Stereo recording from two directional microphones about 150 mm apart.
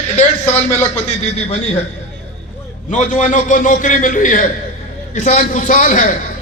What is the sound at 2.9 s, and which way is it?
A man's voice, 55° left (ahead or behind).